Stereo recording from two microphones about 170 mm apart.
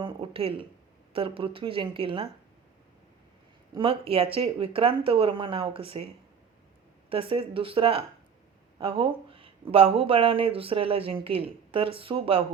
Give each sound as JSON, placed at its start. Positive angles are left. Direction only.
{"t": 0.0, "sound": "speech", "side_deg": -35}
{"t": 3.8, "sound": "speech", "side_deg": -35}
{"t": 7.1, "sound": "speech", "side_deg": -30}